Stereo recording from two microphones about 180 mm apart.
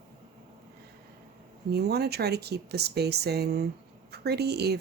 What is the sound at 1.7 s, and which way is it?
Speech, 65° right (ahead or behind).